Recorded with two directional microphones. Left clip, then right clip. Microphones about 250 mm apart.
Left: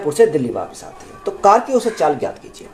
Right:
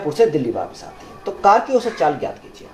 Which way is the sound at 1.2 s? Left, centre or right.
Left.